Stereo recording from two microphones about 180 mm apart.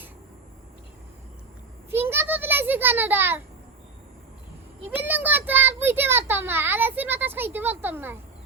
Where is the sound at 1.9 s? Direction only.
15° right (ahead or behind).